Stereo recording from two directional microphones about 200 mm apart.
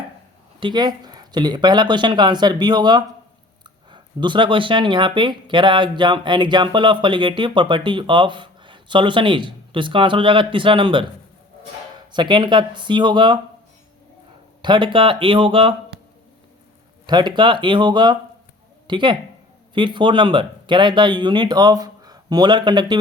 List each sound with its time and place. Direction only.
0.6 s speech: 20° right (ahead or behind)
12.1 s speech: 20° right (ahead or behind)
14.6 s speech: 25° right (ahead or behind)
17.1 s speech: 20° right (ahead or behind)